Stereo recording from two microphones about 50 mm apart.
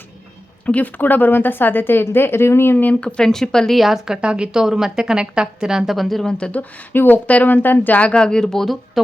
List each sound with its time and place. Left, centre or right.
0.6 s a woman's voice: left
2.7 s speech: left
3.2 s speech: centre
3.8 s a woman's voice: centre
6.3 s speech: centre
6.6 s speech: left
8.2 s speech: centre